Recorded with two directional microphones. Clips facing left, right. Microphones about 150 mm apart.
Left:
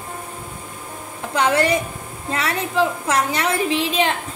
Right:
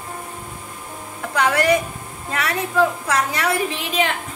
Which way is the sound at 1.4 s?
25° left (ahead or behind).